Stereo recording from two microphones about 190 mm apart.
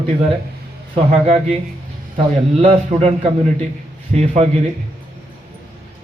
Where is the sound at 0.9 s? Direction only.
30° right (ahead or behind).